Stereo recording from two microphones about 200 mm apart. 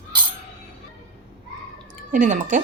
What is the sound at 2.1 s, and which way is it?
Speech, 40° right (ahead or behind).